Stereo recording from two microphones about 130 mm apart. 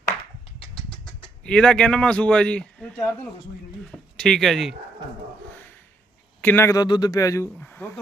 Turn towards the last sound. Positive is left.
turn(degrees=15)  # may be behind; listen again after turning